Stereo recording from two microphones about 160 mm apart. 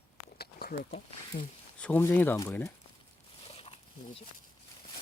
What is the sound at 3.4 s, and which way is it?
Pig, 35° left (ahead or behind).